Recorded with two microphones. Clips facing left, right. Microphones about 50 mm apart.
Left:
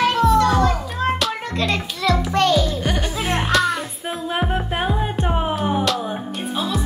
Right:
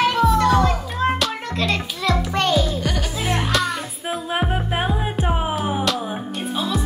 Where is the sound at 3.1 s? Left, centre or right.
Centre.